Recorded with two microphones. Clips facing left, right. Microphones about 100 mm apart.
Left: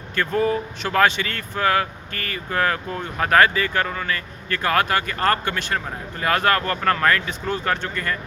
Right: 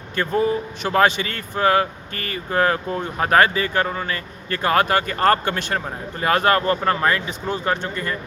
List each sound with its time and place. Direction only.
0.2 s speech: 25° right (ahead or behind)